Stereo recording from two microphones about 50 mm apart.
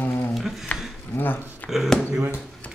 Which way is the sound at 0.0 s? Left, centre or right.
Left.